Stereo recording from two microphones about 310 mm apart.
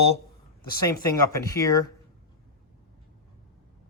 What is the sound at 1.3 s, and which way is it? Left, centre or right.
Speech, centre.